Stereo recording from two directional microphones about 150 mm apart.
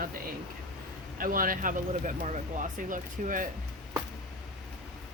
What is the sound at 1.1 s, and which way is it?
Speech, 65° right (ahead or behind).